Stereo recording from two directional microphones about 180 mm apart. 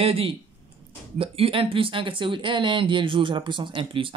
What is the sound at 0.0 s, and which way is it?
Speech, 30° right (ahead or behind).